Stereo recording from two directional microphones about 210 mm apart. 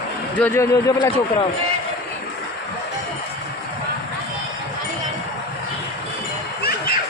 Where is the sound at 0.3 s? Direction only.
10° left (ahead or behind).